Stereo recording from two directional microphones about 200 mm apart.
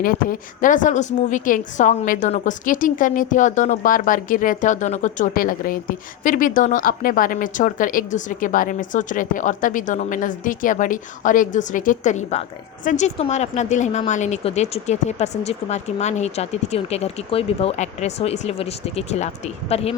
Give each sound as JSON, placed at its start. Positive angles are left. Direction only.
{"t": 0.0, "sound": "a woman's voice", "side_deg": 45}